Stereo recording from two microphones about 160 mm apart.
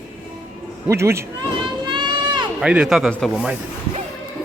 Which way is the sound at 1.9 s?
30° right (ahead or behind).